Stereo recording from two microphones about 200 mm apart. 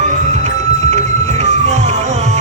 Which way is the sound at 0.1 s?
35° right (ahead or behind).